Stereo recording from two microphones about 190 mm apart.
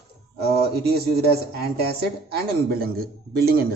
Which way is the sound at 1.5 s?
55° right (ahead or behind).